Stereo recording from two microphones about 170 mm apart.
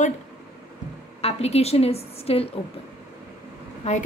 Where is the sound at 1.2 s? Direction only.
35° left (ahead or behind).